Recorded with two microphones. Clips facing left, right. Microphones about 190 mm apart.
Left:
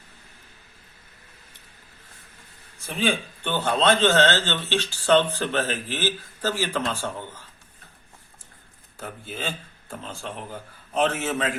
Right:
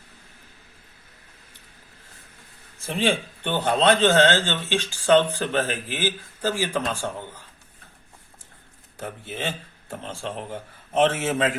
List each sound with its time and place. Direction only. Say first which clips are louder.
3.1 s speech: right 1 dB; 20° right (ahead or behind)
9.0 s a man's voice: right 2 dB; 20° right (ahead or behind)